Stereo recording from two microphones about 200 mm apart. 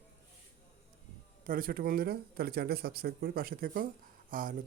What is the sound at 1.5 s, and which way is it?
A man's voice, 45° right (ahead or behind).